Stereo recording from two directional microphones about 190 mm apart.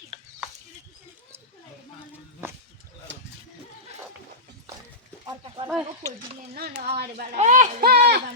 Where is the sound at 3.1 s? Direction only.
75° right (ahead or behind).